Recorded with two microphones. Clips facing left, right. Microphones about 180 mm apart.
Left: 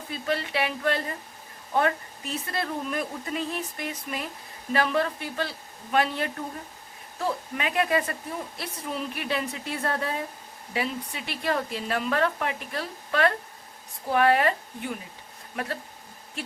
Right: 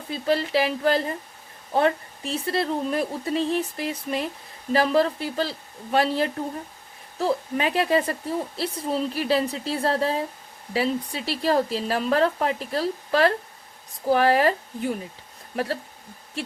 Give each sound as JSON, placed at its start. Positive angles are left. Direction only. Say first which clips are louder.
{"t": 0.1, "sound": "speech", "louder": "right 6 dB", "side_deg": -35}